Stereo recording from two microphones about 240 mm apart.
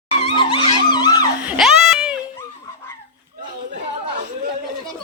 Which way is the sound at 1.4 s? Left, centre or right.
Centre.